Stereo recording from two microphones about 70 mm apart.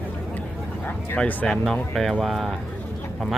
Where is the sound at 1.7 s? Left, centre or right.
Centre.